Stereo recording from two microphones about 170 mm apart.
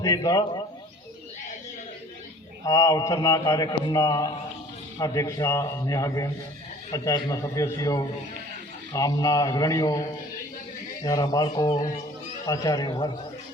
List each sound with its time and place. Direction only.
0.0 s a man's voice: 20° left (ahead or behind)
2.6 s a man's voice: 20° left (ahead or behind)